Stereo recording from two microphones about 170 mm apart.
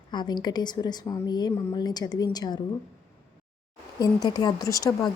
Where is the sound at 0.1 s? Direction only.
25° left (ahead or behind).